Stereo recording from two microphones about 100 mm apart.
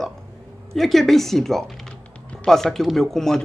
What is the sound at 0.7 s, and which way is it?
Speech, centre (ahead or behind).